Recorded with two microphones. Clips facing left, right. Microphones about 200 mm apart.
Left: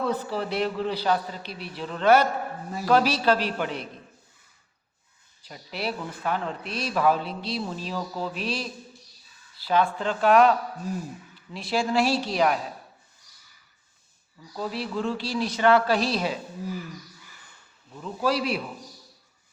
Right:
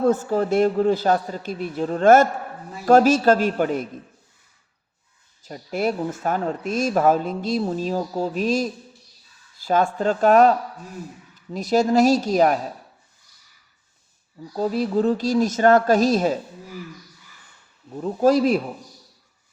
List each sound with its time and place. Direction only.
0.0 s speech: 50° right (ahead or behind)
5.4 s speech: 45° right (ahead or behind)
14.3 s speech: 40° right (ahead or behind)
17.9 s speech: 45° right (ahead or behind)